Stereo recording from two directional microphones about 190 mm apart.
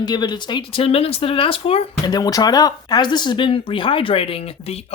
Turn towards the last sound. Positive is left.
turn(degrees=30)  # may be behind; listen again after turning